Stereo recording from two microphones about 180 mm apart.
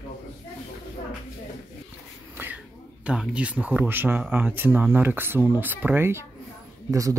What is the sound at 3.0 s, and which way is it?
Speech, 5° right (ahead or behind).